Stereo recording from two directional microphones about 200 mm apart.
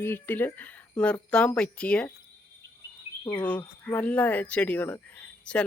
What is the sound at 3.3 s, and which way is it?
Speech, 5° left (ahead or behind).